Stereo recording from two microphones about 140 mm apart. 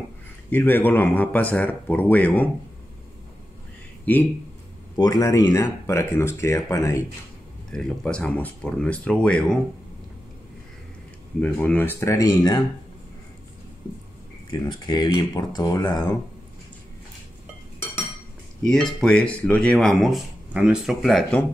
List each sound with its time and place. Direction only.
0.5 s speech: 15° left (ahead or behind)
4.0 s speech: 15° left (ahead or behind)
4.9 s speech: 25° left (ahead or behind)
7.7 s speech: 5° left (ahead or behind)
11.4 s speech: 10° left (ahead or behind); by 12.6 s 30° left (ahead or behind)
14.5 s speech: 30° left (ahead or behind)
18.6 s speech: 5° left (ahead or behind)